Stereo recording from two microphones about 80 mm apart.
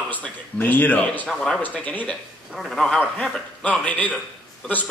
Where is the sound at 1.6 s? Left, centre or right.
Centre.